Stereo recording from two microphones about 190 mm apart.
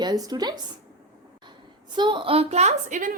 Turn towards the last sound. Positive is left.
turn(degrees=-40)  # may be behind; listen again after turning